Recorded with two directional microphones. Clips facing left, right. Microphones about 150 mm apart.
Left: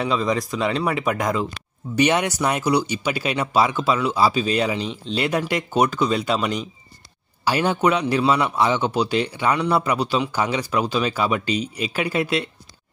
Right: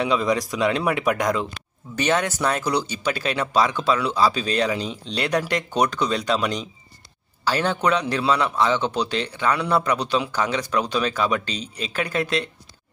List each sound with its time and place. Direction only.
0.0 s speech: centre (ahead or behind)